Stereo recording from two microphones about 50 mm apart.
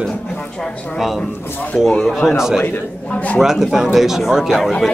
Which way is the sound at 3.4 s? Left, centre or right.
Centre.